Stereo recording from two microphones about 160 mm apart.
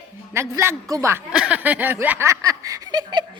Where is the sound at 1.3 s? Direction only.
10° right (ahead or behind); by 3.2 s 25° right (ahead or behind).